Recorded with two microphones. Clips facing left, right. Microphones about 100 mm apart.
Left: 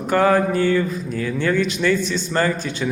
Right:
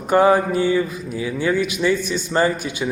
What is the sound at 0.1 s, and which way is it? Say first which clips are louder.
A man's voice: right 2 dB; 20° right (ahead or behind).